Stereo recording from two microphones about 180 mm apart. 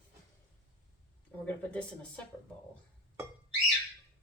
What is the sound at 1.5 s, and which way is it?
Speech, 5° left (ahead or behind).